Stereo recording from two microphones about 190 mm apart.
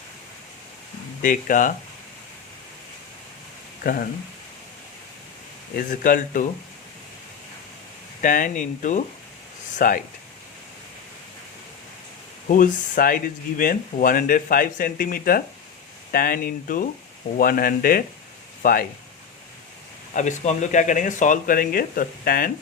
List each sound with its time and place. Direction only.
1.2 s speech: 45° left (ahead or behind)
3.8 s speech: 50° left (ahead or behind)
5.7 s speech: 45° left (ahead or behind)
8.2 s speech: 45° left (ahead or behind)
12.5 s speech: 45° left (ahead or behind)
20.1 s speech: 40° left (ahead or behind)